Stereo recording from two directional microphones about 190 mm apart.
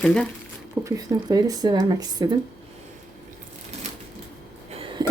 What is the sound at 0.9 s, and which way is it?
Speech, 20° right (ahead or behind).